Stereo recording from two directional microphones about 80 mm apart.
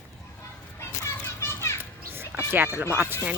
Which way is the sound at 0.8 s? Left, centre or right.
Left.